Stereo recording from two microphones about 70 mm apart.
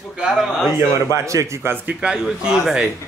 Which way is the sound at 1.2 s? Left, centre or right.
Right.